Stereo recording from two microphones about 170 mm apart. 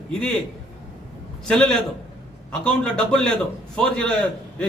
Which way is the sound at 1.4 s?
5° left (ahead or behind).